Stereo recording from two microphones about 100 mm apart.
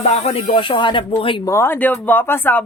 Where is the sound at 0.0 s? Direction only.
90° left; by 1.4 s 60° left (ahead or behind).